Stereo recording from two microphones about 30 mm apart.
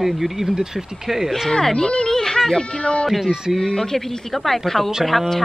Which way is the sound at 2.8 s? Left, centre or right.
Left.